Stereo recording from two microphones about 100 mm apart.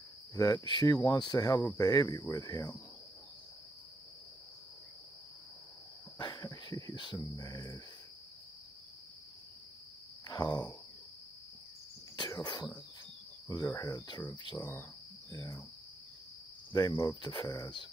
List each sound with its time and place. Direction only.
0.3 s cricket: 40° left (ahead or behind)
6.1 s cricket: 45° left (ahead or behind)
10.2 s speech: 40° left (ahead or behind)
12.2 s cough: 45° left (ahead or behind)
13.5 s cricket: 35° left (ahead or behind)
14.6 s speech: 20° left (ahead or behind)
15.3 s cricket: 35° left (ahead or behind)
16.7 s cricket: 35° left (ahead or behind)